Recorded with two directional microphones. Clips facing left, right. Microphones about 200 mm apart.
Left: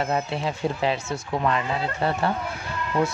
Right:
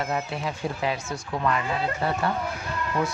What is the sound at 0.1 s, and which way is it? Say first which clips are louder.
Speech: left 3 dB; 25° left (ahead or behind).